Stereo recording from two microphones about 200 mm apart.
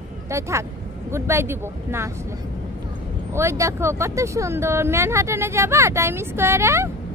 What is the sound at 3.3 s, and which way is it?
Speech, 15° right (ahead or behind).